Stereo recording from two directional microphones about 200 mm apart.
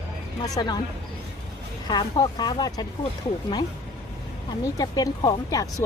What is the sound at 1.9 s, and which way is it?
Speech, 20° left (ahead or behind).